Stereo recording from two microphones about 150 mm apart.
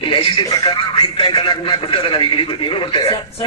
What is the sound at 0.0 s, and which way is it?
Speech, 35° left (ahead or behind).